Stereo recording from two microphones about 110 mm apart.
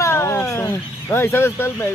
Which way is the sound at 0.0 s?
25° left (ahead or behind).